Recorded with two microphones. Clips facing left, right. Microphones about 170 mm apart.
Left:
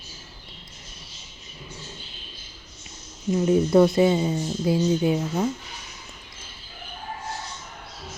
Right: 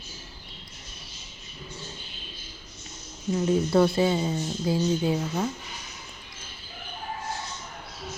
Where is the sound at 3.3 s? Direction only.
20° left (ahead or behind).